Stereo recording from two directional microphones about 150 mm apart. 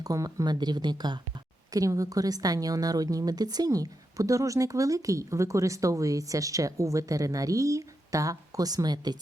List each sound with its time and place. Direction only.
0.0 s a woman's voice: 25° right (ahead or behind)